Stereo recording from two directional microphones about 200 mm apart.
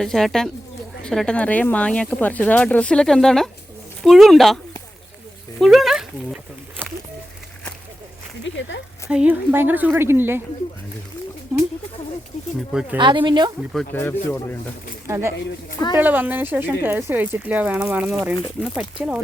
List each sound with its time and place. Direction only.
0.0 s speech: centre (ahead or behind)
5.5 s a sound: centre (ahead or behind)
8.4 s speech: 65° left (ahead or behind)
9.0 s speech: 5° right (ahead or behind)
13.0 s speech: 25° right (ahead or behind)
13.9 s speech: 10° left (ahead or behind)
15.0 s speech: 15° right (ahead or behind)